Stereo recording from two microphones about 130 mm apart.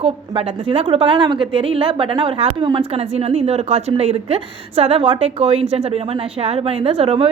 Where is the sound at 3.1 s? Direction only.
50° right (ahead or behind).